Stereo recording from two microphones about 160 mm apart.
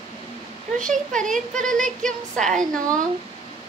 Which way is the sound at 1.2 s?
55° right (ahead or behind).